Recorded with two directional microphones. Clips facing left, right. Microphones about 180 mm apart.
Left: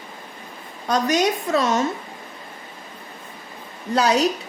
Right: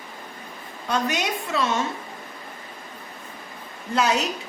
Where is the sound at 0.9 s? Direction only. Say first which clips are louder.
Left 5 dB; 40° left (ahead or behind).